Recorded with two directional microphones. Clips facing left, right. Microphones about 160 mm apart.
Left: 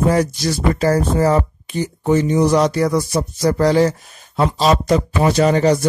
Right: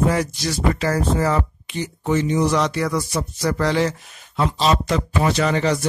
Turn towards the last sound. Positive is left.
turn(degrees=40)  # may be behind; listen again after turning